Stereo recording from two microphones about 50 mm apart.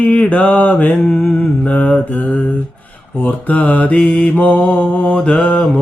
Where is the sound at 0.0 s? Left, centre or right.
Left.